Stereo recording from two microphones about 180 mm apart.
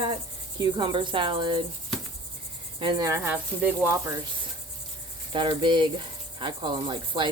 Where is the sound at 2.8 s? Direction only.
25° right (ahead or behind).